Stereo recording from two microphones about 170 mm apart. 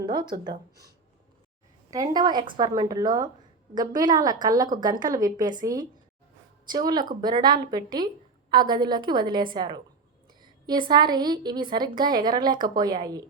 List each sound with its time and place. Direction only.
0.3 s a woman's voice: 25° right (ahead or behind)
1.9 s a woman's voice: 20° right (ahead or behind)